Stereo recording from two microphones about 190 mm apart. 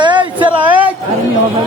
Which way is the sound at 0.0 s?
25° right (ahead or behind).